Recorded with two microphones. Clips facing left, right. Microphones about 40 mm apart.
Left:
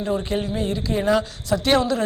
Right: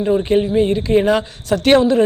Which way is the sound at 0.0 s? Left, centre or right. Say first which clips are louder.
Right 8 dB; right.